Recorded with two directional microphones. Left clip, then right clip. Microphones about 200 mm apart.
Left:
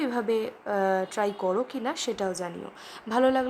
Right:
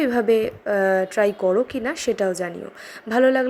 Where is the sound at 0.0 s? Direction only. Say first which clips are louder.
Right 8 dB; 15° right (ahead or behind).